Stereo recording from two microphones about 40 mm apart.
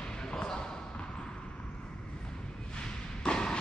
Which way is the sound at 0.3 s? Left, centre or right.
Left.